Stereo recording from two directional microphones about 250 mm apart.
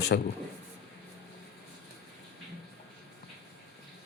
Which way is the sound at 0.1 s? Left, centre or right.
Left.